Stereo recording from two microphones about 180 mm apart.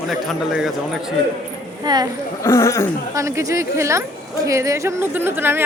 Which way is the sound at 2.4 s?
15° left (ahead or behind).